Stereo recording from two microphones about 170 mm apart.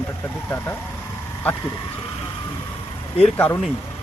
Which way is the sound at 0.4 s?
15° left (ahead or behind).